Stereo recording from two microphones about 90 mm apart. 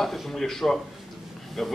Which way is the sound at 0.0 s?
Centre (ahead or behind).